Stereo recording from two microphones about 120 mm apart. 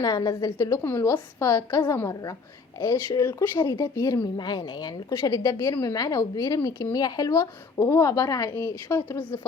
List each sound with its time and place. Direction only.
0.0 s a woman's voice: 35° left (ahead or behind)